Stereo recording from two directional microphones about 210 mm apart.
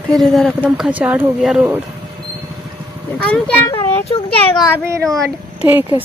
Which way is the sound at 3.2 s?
5° left (ahead or behind).